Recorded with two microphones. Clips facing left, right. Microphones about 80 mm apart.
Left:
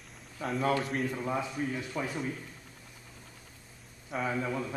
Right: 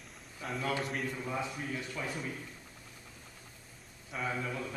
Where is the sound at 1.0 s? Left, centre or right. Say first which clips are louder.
Left 4 dB; left.